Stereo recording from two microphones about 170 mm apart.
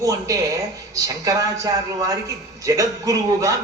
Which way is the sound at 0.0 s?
20° right (ahead or behind).